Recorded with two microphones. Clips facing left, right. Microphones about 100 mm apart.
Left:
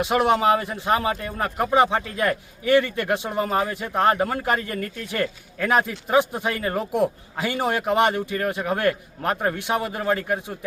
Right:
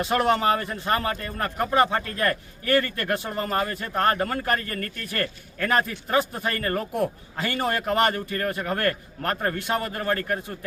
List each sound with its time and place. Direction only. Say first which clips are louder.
0.0 s speech: left 2 dB; 15° left (ahead or behind)